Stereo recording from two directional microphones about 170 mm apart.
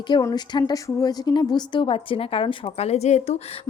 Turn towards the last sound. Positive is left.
turn(degrees=40)  # may be behind; listen again after turning